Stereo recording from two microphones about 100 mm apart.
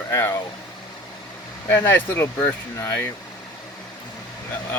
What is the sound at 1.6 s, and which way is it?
Speech, 25° left (ahead or behind).